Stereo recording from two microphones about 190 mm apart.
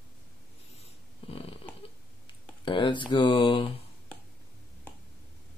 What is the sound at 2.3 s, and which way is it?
Speech, 25° left (ahead or behind).